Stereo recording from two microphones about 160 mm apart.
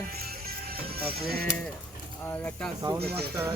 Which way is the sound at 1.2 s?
70° right (ahead or behind).